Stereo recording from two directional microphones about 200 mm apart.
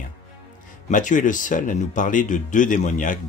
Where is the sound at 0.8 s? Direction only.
40° left (ahead or behind).